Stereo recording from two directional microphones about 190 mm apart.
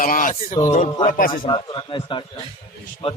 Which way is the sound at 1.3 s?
25° left (ahead or behind).